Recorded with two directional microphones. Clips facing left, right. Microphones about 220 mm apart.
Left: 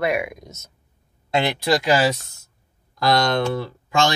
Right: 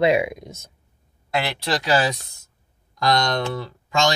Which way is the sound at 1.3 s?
20° left (ahead or behind).